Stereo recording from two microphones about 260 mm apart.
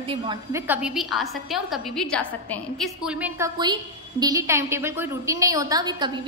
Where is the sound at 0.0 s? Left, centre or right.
Centre.